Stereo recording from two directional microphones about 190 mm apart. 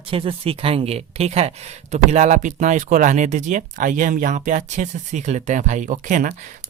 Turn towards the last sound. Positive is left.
turn(degrees=-40)  # may be behind; listen again after turning